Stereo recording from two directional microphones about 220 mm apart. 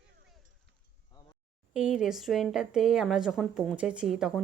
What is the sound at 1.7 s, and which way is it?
A woman's voice, 5° right (ahead or behind).